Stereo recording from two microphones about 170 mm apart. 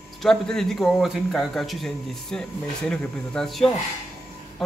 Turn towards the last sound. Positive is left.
turn(degrees=0)  # may be behind; listen again after turning